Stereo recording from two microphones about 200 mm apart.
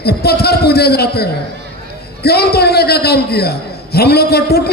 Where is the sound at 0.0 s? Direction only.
50° left (ahead or behind).